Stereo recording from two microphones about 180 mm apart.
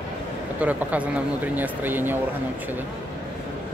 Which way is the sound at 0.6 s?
5° right (ahead or behind).